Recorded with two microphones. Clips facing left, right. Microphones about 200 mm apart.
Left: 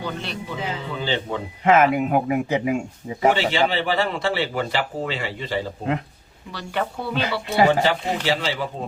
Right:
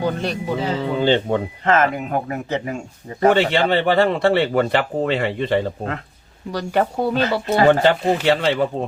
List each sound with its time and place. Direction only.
0.0 s speech: 45° right (ahead or behind)
1.0 s speech: 55° right (ahead or behind)
1.6 s speech: 10° left (ahead or behind)
3.2 s speech: 60° right (ahead or behind)
6.5 s speech: 45° right (ahead or behind)
7.7 s speech: 60° right (ahead or behind)